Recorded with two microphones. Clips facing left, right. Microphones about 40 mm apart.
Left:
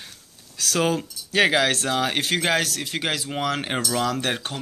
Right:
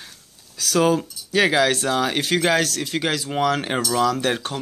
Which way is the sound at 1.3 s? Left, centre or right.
Left.